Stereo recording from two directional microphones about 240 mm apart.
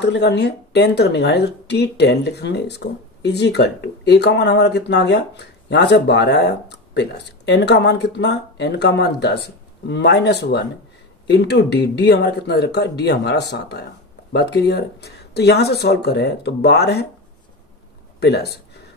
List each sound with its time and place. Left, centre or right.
0.0 s speech: left
18.2 s speech: left